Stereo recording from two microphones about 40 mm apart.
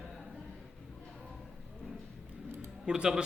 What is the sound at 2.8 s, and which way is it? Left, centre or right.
Speech, centre.